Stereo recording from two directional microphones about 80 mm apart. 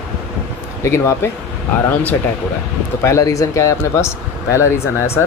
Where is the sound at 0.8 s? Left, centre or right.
Left.